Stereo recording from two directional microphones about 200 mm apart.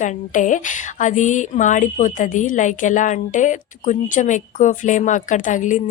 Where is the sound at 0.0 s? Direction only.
40° left (ahead or behind).